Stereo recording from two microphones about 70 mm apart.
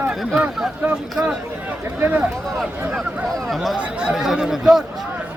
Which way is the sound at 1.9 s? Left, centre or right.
Right.